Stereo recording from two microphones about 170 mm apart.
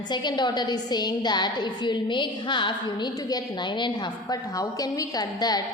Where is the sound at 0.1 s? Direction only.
25° left (ahead or behind).